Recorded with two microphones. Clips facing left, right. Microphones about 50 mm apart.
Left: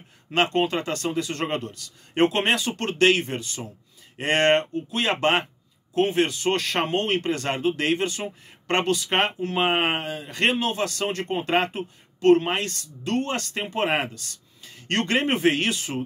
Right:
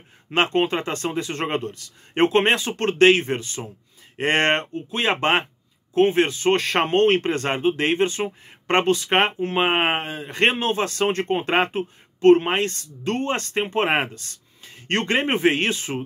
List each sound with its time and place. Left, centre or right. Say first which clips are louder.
0.3 s speech: right 2 dB; right